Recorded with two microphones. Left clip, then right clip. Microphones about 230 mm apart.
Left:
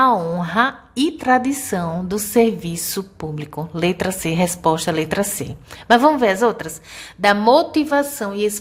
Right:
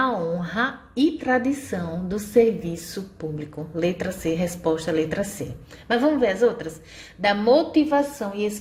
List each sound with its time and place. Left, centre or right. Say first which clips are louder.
0.0 s a woman's voice: left 8 dB; centre